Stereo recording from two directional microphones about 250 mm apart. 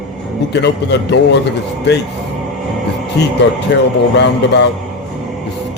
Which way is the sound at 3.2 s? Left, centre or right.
Left.